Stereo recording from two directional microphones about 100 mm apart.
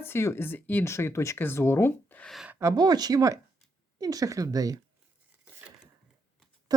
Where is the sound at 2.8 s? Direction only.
45° right (ahead or behind).